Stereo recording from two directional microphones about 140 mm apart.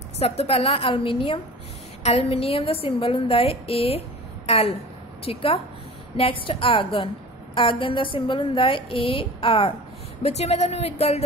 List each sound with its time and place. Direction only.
0.2 s a woman's voice: 45° left (ahead or behind)
5.2 s a woman's voice: 45° left (ahead or behind)